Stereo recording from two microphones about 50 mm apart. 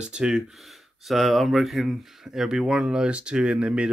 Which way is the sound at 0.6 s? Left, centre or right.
Centre.